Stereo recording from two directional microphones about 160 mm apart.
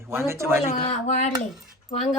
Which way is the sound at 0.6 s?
45° left (ahead or behind).